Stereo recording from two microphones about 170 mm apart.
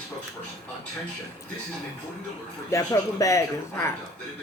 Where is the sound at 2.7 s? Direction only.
20° left (ahead or behind).